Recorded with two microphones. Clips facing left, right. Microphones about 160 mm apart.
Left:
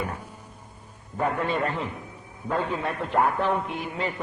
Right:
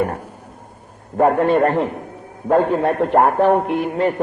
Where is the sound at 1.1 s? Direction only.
55° right (ahead or behind).